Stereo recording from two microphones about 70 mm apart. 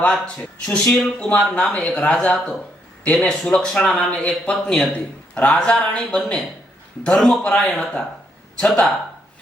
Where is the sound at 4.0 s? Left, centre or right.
Centre.